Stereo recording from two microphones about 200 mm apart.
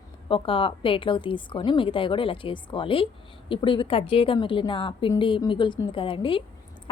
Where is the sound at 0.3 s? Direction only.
25° left (ahead or behind).